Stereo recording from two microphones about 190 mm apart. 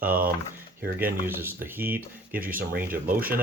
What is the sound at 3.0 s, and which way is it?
Speech, 50° right (ahead or behind).